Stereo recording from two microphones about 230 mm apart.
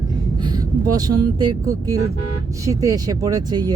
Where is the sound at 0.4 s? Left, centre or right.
Centre.